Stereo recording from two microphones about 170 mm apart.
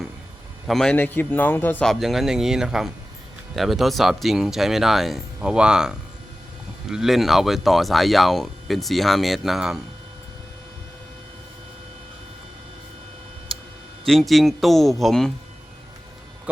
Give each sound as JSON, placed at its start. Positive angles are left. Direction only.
{"t": 0.7, "sound": "speech", "side_deg": 5}
{"t": 14.0, "sound": "speech", "side_deg": 0}